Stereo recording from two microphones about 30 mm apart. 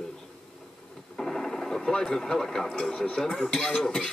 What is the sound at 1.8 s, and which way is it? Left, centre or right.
Speech, left.